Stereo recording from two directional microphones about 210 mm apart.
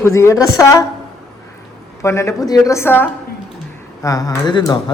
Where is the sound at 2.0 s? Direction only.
15° left (ahead or behind).